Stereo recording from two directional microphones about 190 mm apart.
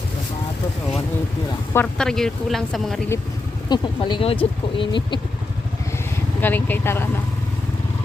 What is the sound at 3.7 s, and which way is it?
Speech, 25° left (ahead or behind).